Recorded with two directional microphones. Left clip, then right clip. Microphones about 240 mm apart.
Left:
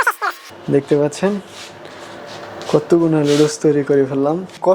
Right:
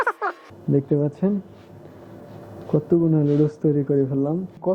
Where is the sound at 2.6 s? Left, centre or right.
Centre.